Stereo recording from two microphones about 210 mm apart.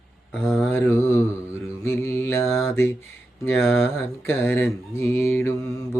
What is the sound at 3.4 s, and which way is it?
Speech, 10° left (ahead or behind).